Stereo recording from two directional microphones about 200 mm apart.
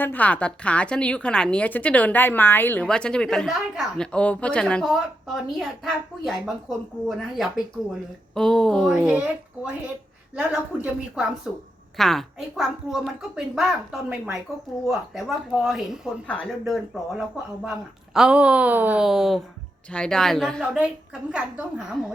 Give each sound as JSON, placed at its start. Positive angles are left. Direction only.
{"t": 0.0, "sound": "a woman's voice", "side_deg": 10}
{"t": 10.3, "sound": "a woman's voice", "side_deg": -5}